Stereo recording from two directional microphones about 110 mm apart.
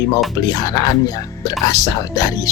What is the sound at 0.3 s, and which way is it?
Speech, 35° left (ahead or behind).